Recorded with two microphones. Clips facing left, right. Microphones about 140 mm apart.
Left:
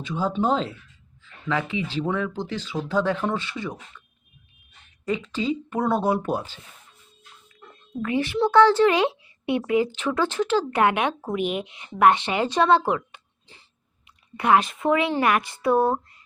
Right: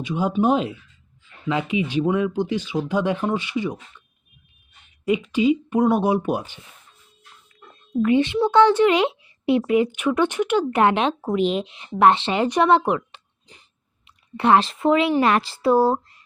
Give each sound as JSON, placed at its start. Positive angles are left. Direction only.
{"t": 0.0, "sound": "speech", "side_deg": -15}
{"t": 5.0, "sound": "speech", "side_deg": -15}
{"t": 8.0, "sound": "speech", "side_deg": -20}